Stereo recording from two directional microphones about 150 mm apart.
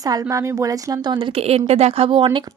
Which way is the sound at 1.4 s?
45° right (ahead or behind).